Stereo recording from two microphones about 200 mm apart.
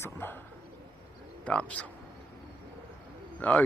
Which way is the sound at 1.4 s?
5° left (ahead or behind).